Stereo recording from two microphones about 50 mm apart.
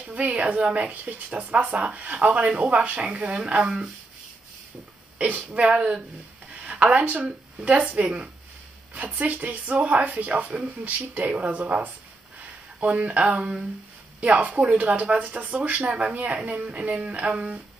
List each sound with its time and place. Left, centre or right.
0.0 s speech: right
5.2 s speech: right
5.7 s speech: centre
6.5 s a sound: right
7.2 s speech: centre
14.5 s speech: centre
14.8 s speech: right